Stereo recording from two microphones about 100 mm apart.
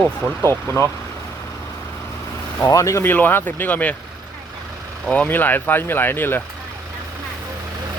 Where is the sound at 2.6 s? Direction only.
30° left (ahead or behind).